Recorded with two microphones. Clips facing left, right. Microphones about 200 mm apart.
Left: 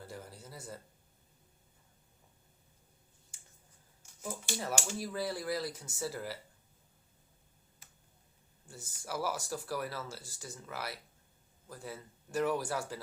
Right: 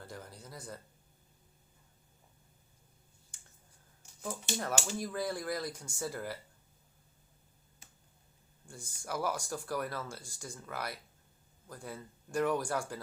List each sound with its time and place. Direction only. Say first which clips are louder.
0.1 s a sound: even; 5° left (ahead or behind)
4.5 s speech: right 3 dB; 20° right (ahead or behind)
4.9 s speech: right 1 dB; 5° left (ahead or behind)
8.6 s speech: right 1 dB; 5° left (ahead or behind)